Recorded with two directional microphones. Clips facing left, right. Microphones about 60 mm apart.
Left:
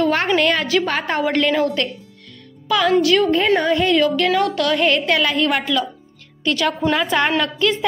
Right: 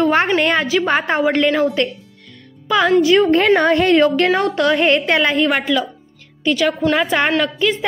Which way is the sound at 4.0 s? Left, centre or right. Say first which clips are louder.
Right 2 dB; right.